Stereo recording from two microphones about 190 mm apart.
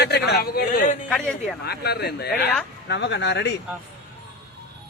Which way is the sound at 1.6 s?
55° left (ahead or behind).